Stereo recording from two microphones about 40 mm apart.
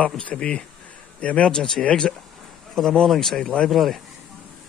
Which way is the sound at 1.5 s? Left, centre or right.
Centre.